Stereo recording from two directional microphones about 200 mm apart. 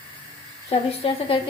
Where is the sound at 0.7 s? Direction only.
25° left (ahead or behind).